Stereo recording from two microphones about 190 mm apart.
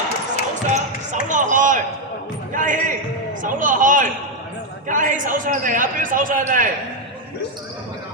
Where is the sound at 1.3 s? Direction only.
40° right (ahead or behind).